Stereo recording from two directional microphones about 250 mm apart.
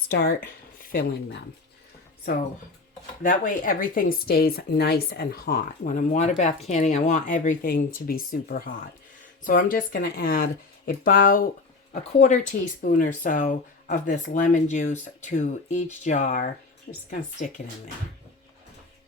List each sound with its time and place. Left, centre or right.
0.1 s speech: left
3.2 s speech: left